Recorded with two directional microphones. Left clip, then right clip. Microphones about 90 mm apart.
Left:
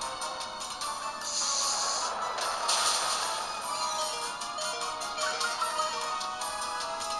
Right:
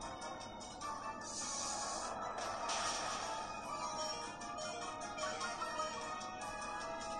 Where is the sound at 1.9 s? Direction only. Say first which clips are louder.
Left 11 dB; 25° left (ahead or behind).